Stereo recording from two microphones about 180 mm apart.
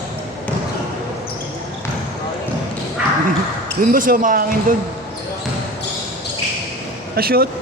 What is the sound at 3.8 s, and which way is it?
Speech, 50° right (ahead or behind).